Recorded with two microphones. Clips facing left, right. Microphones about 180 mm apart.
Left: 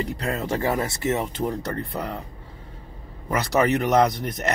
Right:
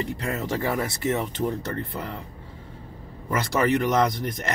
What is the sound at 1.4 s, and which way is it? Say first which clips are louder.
Speech: left 1 dB; 40° left (ahead or behind).